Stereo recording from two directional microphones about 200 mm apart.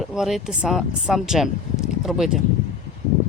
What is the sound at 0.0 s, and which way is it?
Speech, centre (ahead or behind).